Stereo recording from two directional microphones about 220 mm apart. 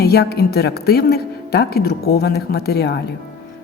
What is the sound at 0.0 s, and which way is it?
A woman's voice, 45° left (ahead or behind).